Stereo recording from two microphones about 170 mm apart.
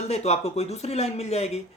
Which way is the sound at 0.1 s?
40° left (ahead or behind).